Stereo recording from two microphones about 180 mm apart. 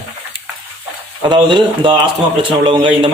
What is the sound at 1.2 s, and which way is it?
A man's voice, 25° right (ahead or behind).